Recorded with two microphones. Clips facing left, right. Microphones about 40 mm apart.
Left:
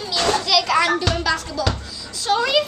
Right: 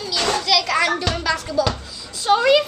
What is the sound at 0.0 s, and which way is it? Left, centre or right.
Children playing, centre.